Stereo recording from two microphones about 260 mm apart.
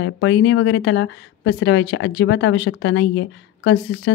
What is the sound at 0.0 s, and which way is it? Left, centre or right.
A woman's voice, left.